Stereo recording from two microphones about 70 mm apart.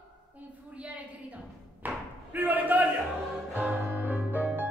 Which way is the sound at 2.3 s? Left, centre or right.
Right.